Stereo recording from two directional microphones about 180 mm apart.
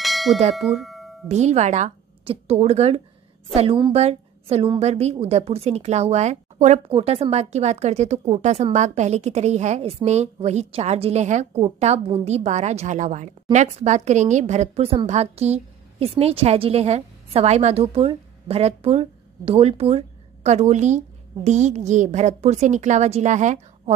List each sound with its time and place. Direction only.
0.0 s bell: centre (ahead or behind)
0.6 s chime: centre (ahead or behind)
1.3 s a woman's voice: 40° right (ahead or behind)